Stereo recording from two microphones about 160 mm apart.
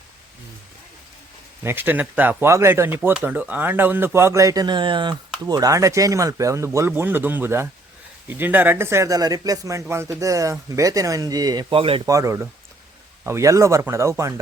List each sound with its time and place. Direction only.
1.6 s speech: 10° right (ahead or behind); by 12.0 s 35° right (ahead or behind)
12.0 s speech: 20° right (ahead or behind)